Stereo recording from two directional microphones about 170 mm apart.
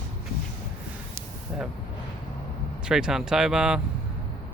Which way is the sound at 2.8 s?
5° right (ahead or behind).